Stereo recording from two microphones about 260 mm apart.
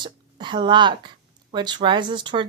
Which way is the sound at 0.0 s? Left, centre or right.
Centre.